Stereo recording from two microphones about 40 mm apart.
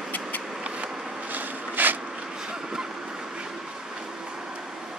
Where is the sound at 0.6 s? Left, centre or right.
Right.